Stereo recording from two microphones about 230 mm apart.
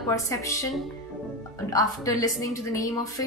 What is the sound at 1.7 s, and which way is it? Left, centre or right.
A woman's voice, centre.